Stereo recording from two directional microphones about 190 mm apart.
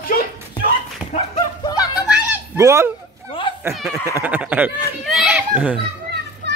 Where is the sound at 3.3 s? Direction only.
25° left (ahead or behind).